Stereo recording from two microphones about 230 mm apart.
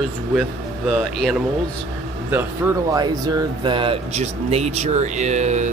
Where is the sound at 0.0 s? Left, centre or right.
Centre.